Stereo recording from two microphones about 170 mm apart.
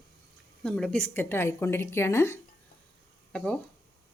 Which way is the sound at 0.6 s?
5° left (ahead or behind).